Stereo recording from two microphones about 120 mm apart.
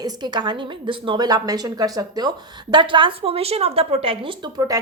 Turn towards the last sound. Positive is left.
turn(degrees=-30)  # may be behind; listen again after turning